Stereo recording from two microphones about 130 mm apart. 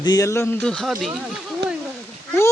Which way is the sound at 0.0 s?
30° left (ahead or behind).